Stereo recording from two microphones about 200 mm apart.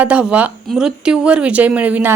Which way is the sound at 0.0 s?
5° right (ahead or behind).